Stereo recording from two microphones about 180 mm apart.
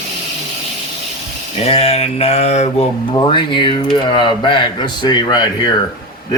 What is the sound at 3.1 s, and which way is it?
Speech, 25° left (ahead or behind).